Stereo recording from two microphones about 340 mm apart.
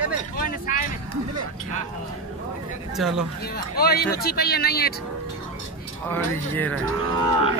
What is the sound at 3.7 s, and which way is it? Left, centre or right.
Speech, left.